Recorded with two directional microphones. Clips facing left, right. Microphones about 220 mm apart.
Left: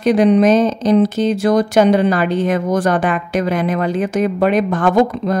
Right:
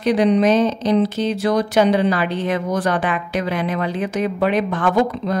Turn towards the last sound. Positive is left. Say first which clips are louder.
# left 4 dB
turn(degrees=45)  # may be behind; listen again after turning